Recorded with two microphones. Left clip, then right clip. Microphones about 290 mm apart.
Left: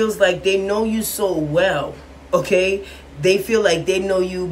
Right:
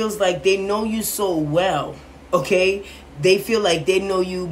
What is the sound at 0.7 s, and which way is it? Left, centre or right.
Speech, centre.